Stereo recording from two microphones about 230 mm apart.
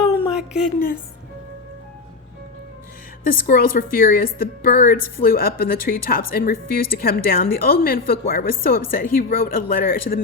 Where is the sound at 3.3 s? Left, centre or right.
Left.